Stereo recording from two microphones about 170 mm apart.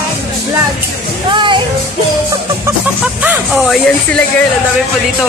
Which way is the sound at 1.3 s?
30° right (ahead or behind).